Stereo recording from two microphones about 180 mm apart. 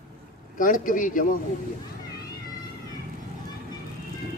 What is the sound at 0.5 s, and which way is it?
Speech, 50° left (ahead or behind).